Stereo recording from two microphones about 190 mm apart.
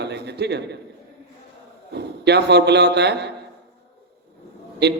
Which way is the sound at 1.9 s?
60° right (ahead or behind).